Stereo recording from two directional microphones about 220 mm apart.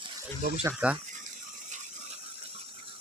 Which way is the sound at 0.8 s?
5° right (ahead or behind).